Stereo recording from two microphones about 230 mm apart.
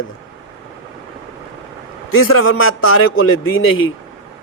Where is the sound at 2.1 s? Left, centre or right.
Left.